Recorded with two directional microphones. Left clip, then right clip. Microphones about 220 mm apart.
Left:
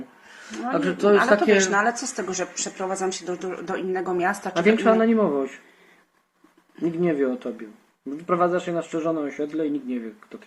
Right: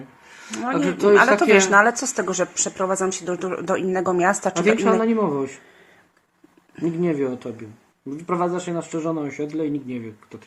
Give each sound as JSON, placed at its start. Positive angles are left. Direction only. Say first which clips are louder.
{"t": 0.3, "sound": "a sound", "louder": "right 1 dB", "side_deg": 0}
{"t": 0.8, "sound": "a man's voice", "louder": "right 2 dB", "side_deg": 0}
{"t": 1.4, "sound": "a woman's voice", "louder": "right 5 dB", "side_deg": -45}
{"t": 4.6, "sound": "a man's voice", "louder": "left 1 dB", "side_deg": 0}
{"t": 6.8, "sound": "a man's voice", "louder": "even", "side_deg": 0}